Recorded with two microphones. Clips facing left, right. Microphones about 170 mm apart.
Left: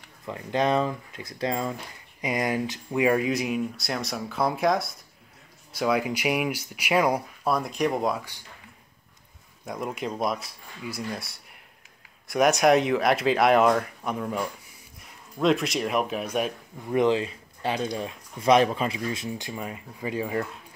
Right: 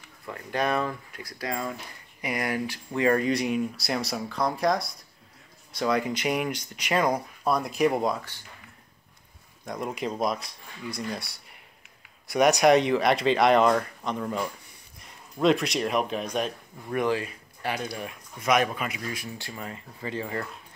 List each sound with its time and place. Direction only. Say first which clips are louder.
0.2 s speech: left 3 dB; 20° left (ahead or behind); by 8.3 s centre (ahead or behind)
9.7 s speech: even; centre (ahead or behind)
16.9 s speech: left 4 dB; 20° left (ahead or behind)